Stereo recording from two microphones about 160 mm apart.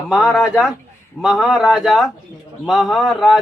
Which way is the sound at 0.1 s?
5° right (ahead or behind).